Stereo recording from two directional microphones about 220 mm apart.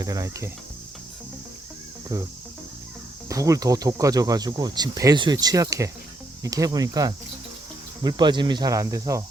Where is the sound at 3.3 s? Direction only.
15° right (ahead or behind).